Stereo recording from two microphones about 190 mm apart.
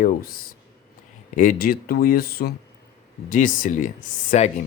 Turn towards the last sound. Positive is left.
turn(degrees=40)  # may be behind; listen again after turning